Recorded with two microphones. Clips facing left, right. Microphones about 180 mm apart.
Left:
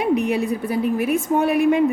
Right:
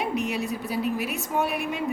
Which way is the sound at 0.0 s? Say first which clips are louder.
Left 8 dB; 55° left (ahead or behind).